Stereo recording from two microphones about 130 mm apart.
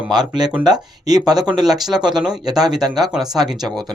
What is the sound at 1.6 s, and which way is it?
Speech, centre (ahead or behind).